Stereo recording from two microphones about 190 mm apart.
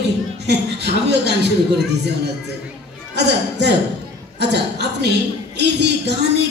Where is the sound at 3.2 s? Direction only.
65° right (ahead or behind).